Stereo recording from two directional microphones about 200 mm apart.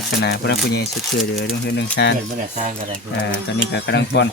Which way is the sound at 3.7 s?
60° left (ahead or behind).